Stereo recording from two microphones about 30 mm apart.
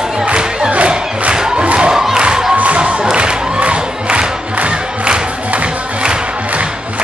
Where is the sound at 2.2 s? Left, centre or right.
Right.